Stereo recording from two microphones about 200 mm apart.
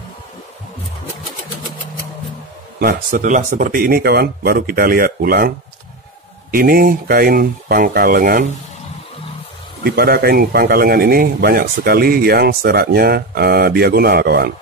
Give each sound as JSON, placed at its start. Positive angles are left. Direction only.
{"t": 2.8, "sound": "a man's voice", "side_deg": -45}
{"t": 6.5, "sound": "a man's voice", "side_deg": -50}
{"t": 9.8, "sound": "a man's voice", "side_deg": -50}